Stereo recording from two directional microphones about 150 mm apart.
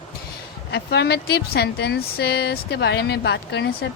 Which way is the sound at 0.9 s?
90° left.